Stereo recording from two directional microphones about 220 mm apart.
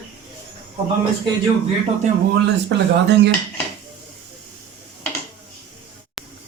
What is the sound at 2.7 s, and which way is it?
Speech, 50° right (ahead or behind).